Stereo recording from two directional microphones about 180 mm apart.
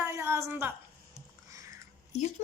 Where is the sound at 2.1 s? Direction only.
40° left (ahead or behind).